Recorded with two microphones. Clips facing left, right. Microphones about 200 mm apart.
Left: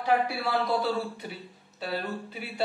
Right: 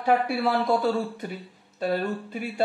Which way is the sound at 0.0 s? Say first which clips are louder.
Right 4 dB; 50° right (ahead or behind).